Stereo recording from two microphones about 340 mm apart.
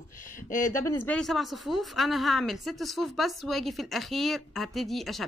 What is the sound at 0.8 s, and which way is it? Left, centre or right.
Speech, centre.